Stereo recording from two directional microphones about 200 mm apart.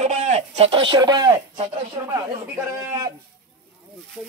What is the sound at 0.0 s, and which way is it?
Radio, 35° right (ahead or behind).